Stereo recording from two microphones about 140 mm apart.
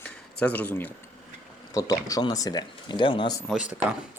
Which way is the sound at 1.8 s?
25° left (ahead or behind).